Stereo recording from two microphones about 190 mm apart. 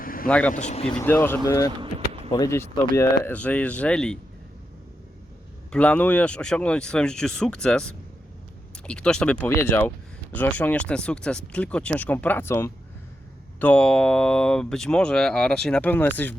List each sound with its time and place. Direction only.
0.0 s vehicle: 50° left (ahead or behind)
0.3 s speech: 5° left (ahead or behind)
0.5 s speech: 35° left (ahead or behind)
0.9 s speech: 10° left (ahead or behind)
3.2 s speech: 5° left (ahead or behind)
5.7 s speech: 5° left (ahead or behind)